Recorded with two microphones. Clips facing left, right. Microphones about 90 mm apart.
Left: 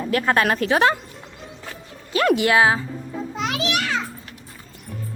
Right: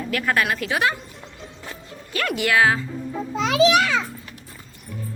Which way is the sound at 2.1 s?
25° left (ahead or behind).